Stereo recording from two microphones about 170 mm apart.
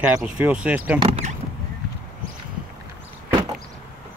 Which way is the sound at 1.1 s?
40° right (ahead or behind).